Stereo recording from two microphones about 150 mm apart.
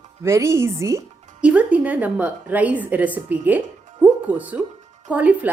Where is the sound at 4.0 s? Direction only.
10° right (ahead or behind).